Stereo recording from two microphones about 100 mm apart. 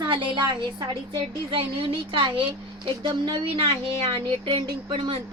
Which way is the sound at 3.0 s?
50° right (ahead or behind).